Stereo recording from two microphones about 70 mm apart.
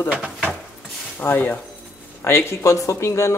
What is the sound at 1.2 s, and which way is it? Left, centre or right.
Speech, left.